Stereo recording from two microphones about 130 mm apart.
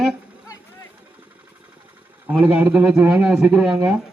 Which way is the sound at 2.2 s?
10° right (ahead or behind).